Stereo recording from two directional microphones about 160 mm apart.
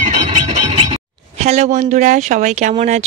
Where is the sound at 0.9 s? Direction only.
40° right (ahead or behind).